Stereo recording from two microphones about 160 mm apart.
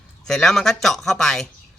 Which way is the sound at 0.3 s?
Centre (ahead or behind).